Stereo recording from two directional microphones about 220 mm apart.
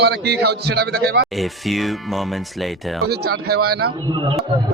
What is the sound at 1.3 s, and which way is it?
Speech, centre (ahead or behind).